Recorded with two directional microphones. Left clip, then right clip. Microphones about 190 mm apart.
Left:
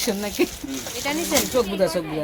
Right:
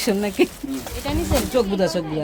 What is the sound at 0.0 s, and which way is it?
Speech, 55° right (ahead or behind).